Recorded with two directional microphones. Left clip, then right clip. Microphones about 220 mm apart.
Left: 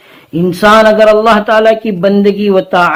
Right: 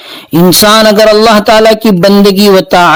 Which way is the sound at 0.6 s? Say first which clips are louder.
Left 1 dB; 45° right (ahead or behind).